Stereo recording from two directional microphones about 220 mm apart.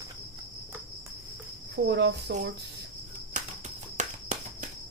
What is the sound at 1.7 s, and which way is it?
Speech, 50° right (ahead or behind).